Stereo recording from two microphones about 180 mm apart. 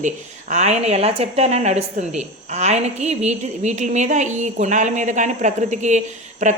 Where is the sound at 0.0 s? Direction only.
40° right (ahead or behind).